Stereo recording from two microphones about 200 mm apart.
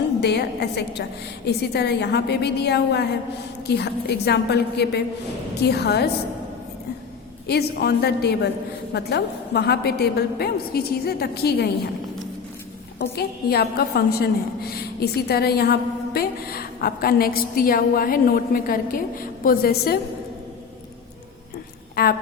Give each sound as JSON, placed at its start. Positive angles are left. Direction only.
{"t": 0.2, "sound": "a woman's voice", "side_deg": 55}
{"t": 7.4, "sound": "a woman's voice", "side_deg": 55}
{"t": 13.0, "sound": "a woman's voice", "side_deg": 55}
{"t": 22.0, "sound": "a woman's voice", "side_deg": 50}